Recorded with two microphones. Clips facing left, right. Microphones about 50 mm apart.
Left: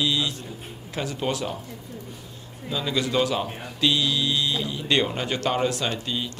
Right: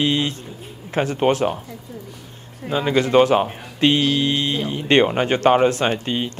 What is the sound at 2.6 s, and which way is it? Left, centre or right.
Speech, right.